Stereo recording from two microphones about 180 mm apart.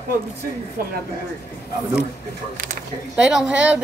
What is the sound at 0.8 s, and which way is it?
Speech, 55° right (ahead or behind).